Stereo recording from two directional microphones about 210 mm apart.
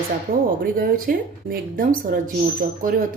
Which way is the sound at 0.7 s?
45° right (ahead or behind).